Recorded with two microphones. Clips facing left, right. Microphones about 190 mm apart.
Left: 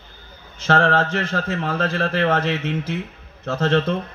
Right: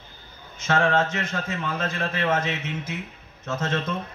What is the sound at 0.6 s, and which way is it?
Speech, 35° left (ahead or behind).